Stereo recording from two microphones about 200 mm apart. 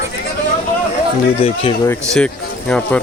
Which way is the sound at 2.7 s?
5° left (ahead or behind).